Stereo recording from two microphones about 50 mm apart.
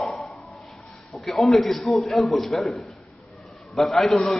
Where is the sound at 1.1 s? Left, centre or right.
Centre.